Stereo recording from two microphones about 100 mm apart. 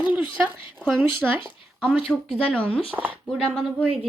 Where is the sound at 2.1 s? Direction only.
5° left (ahead or behind).